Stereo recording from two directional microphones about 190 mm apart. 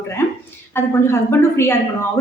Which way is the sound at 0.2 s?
10° left (ahead or behind).